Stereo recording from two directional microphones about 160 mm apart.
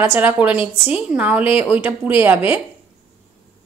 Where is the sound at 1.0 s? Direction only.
5° right (ahead or behind).